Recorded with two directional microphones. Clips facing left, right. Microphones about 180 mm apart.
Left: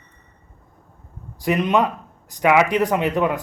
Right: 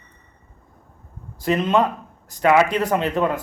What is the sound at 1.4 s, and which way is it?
A man's voice, 15° left (ahead or behind).